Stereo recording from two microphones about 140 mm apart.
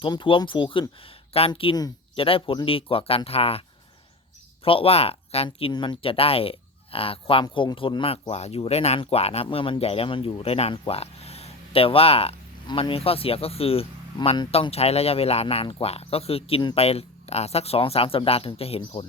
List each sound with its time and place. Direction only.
0.0 s speech: 35° left (ahead or behind)
4.6 s speech: 40° left (ahead or behind)